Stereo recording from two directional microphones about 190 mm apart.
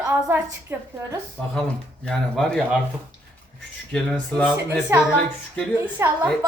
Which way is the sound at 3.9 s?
5° left (ahead or behind).